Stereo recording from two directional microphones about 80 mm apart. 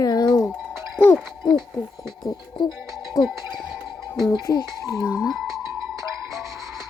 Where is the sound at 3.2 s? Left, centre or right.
Left.